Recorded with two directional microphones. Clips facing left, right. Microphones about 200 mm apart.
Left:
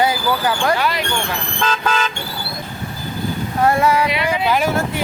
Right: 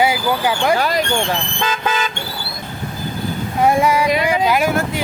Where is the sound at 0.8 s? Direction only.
40° right (ahead or behind).